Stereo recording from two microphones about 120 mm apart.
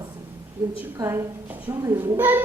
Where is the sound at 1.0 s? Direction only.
25° right (ahead or behind).